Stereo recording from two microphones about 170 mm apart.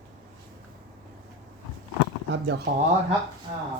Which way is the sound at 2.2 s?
90° right.